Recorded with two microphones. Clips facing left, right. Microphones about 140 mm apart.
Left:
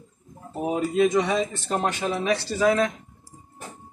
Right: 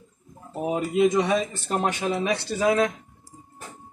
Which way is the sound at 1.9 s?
20° right (ahead or behind).